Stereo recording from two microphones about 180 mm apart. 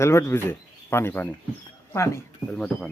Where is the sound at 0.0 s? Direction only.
15° left (ahead or behind).